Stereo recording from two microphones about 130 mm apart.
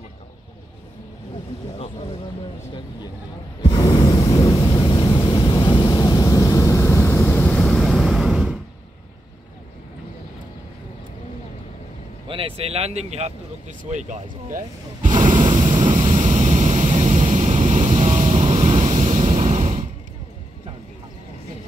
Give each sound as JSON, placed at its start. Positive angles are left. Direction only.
{"t": 3.6, "sound": "a sound", "side_deg": 35}
{"t": 7.6, "sound": "vehicle", "side_deg": 0}
{"t": 12.3, "sound": "speech", "side_deg": -45}
{"t": 13.8, "sound": "speech", "side_deg": -65}
{"t": 15.3, "sound": "waves", "side_deg": -40}
{"t": 15.7, "sound": "waves", "side_deg": -75}